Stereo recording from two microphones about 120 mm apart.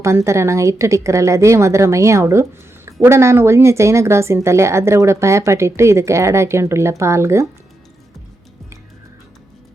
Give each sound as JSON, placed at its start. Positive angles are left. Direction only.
{"t": 0.0, "sound": "a woman's voice", "side_deg": -25}